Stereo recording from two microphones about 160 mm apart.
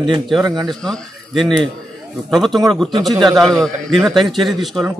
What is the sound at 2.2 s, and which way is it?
Speech, centre (ahead or behind).